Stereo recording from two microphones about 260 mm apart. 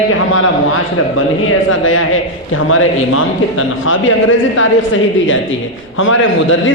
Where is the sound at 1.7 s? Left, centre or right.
Left.